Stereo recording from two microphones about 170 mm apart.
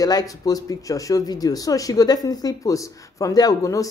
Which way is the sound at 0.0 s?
20° left (ahead or behind).